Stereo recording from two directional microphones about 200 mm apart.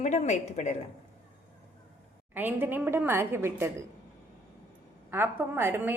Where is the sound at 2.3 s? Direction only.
10° right (ahead or behind).